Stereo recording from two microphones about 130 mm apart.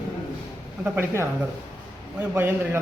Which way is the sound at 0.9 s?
20° right (ahead or behind).